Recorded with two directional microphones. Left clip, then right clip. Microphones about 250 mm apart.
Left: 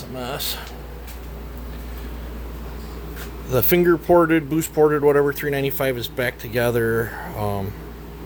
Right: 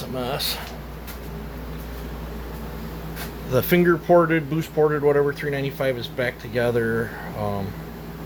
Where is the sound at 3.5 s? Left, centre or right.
Centre.